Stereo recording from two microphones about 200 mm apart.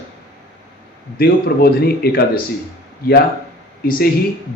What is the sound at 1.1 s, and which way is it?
Speech, 50° left (ahead or behind).